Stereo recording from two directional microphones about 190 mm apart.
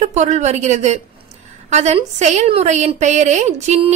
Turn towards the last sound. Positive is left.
turn(degrees=-35)  # may be behind; listen again after turning